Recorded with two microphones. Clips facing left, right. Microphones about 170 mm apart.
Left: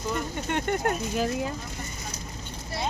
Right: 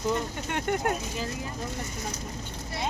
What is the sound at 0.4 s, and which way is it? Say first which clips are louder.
Speech: left 3 dB; 5° right (ahead or behind).